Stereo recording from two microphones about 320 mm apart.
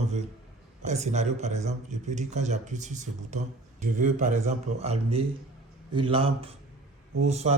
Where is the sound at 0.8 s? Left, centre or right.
Right.